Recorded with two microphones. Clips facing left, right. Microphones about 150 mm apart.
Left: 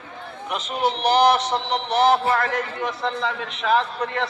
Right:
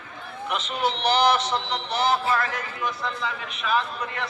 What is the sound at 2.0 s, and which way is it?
A man's voice, 65° left (ahead or behind).